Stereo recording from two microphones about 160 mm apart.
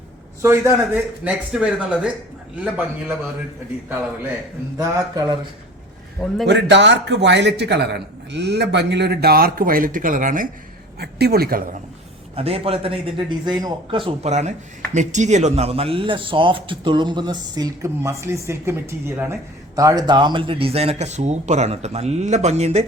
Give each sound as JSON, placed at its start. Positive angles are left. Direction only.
{"t": 0.9, "sound": "a man's voice", "side_deg": -5}
{"t": 4.8, "sound": "speech", "side_deg": -25}
{"t": 6.5, "sound": "a man's voice", "side_deg": -90}
{"t": 11.0, "sound": "a woman's voice", "side_deg": -80}
{"t": 12.4, "sound": "a man's voice", "side_deg": -40}